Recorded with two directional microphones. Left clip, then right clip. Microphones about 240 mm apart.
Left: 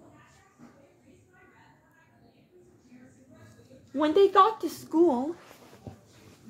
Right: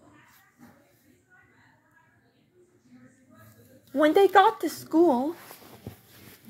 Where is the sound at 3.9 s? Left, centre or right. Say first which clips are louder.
Right 2 dB; centre.